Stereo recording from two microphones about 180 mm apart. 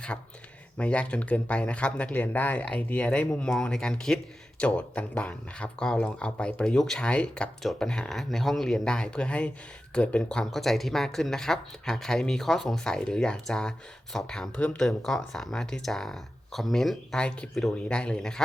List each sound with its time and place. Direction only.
0.1 s speech: 10° left (ahead or behind)